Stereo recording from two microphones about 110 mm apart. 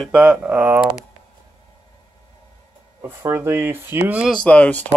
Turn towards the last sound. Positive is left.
turn(degrees=15)  # may be behind; listen again after turning